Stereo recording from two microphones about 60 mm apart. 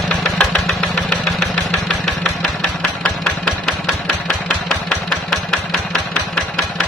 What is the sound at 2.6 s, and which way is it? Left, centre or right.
Engine, centre.